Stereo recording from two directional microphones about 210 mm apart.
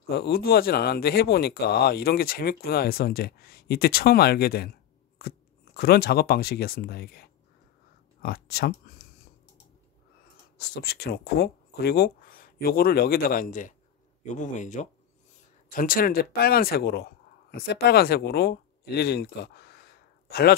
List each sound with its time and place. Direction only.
0.1 s speech: 50° left (ahead or behind)
5.8 s speech: 45° left (ahead or behind)
10.6 s speech: 50° left (ahead or behind)